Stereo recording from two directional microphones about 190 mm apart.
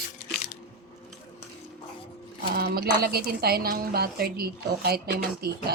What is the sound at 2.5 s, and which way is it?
A woman's voice, 55° right (ahead or behind).